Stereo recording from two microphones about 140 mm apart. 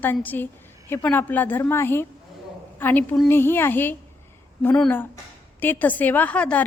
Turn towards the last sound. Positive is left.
turn(degrees=10)  # may be behind; listen again after turning